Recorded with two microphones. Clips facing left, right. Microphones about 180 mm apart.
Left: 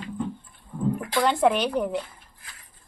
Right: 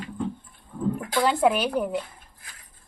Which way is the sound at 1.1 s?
Centre (ahead or behind).